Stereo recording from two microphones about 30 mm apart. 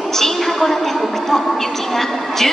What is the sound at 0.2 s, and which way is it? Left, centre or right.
Speech, centre.